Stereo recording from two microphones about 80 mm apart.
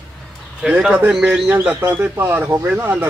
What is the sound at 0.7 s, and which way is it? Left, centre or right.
Speech, centre.